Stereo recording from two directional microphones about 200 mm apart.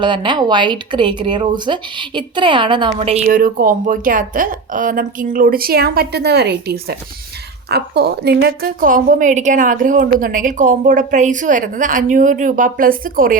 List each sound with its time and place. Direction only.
0.0 s speech: 25° right (ahead or behind)
3.2 s a woman's voice: 45° right (ahead or behind)